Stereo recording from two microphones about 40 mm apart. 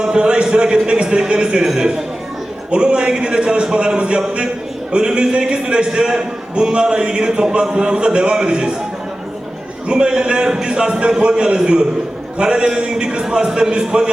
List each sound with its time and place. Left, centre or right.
0.0 s a man's voice: right
9.9 s a man's voice: centre